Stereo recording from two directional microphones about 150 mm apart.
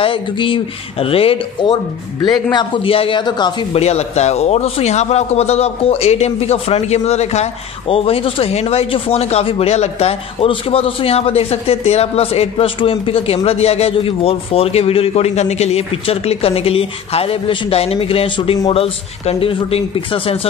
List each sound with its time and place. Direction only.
0.0 s speech: 35° left (ahead or behind)
3.8 s a man's voice: 45° left (ahead or behind)